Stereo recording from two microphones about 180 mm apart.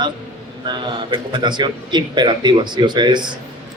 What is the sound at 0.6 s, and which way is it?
A man's voice, 25° right (ahead or behind).